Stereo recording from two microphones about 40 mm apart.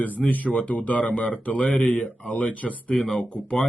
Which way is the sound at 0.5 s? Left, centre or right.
Left.